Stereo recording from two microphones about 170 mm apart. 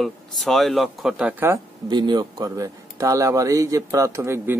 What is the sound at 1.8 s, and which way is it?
Speech, 25° right (ahead or behind).